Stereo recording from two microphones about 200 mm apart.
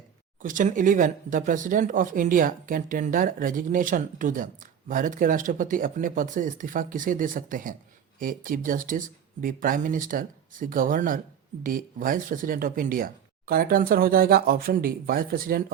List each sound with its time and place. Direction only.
0.4 s speech: 40° right (ahead or behind)